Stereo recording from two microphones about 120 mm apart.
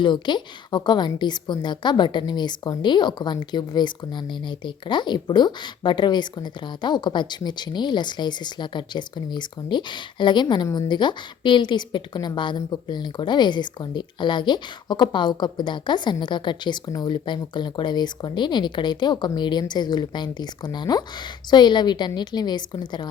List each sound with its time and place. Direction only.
0.0 s speech: 40° left (ahead or behind)